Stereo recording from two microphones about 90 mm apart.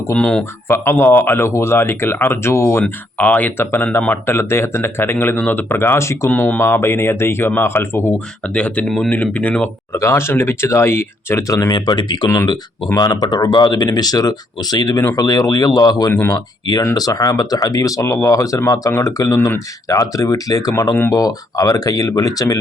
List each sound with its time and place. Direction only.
0.2 s speech: 10° left (ahead or behind)
0.7 s speech: 25° left (ahead or behind)
3.2 s speech: 20° left (ahead or behind)
6.3 s speech: 20° left (ahead or behind)
8.4 s speech: 15° left (ahead or behind)
9.9 s speech: 30° left (ahead or behind)
11.7 s speech: 55° left (ahead or behind)
13.0 s speech: 45° left (ahead or behind)